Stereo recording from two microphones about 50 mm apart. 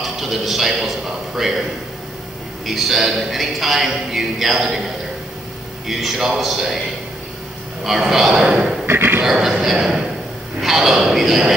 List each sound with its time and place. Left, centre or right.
0.0 s a man's voice: centre
2.6 s a man's voice: centre
5.9 s a man's voice: centre
7.8 s a man's voice: centre
8.8 s a sound: right
9.2 s a man's voice: centre